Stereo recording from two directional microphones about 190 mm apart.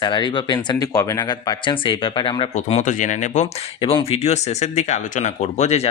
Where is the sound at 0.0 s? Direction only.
25° left (ahead or behind); by 3.5 s 40° left (ahead or behind).